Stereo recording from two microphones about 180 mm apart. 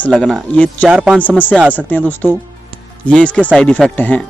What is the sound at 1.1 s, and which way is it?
Speech, 10° left (ahead or behind).